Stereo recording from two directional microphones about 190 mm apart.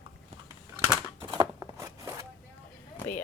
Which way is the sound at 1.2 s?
20° right (ahead or behind).